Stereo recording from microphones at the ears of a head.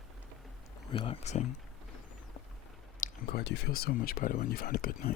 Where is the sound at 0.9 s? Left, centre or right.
Left.